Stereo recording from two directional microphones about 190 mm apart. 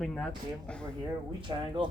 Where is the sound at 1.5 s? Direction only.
25° right (ahead or behind).